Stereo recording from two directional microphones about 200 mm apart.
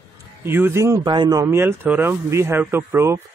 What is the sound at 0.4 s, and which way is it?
Speech, 10° right (ahead or behind).